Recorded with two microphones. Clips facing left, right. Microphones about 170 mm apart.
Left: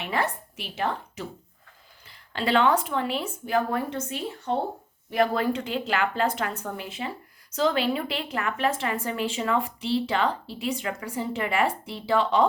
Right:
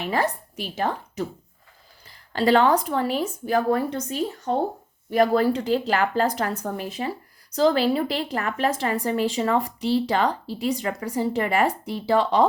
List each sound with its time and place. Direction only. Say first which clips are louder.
0.0 s a woman's voice: right 4 dB; 40° right (ahead or behind)